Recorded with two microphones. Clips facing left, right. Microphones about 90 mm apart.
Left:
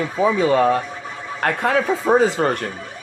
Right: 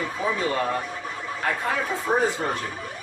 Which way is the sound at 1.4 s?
75° left (ahead or behind).